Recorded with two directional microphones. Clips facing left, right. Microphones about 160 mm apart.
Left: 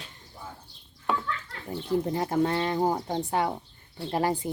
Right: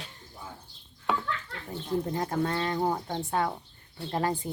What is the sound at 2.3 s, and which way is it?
Speech, 20° left (ahead or behind).